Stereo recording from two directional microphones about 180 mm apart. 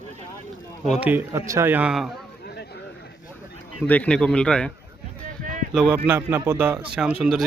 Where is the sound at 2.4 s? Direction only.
65° left (ahead or behind).